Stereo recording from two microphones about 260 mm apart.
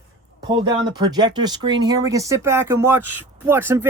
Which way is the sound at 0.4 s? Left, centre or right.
Centre.